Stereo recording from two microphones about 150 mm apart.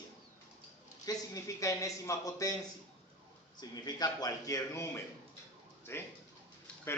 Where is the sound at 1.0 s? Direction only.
20° left (ahead or behind).